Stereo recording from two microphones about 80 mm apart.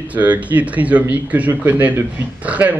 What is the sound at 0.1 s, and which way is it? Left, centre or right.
Speech, centre.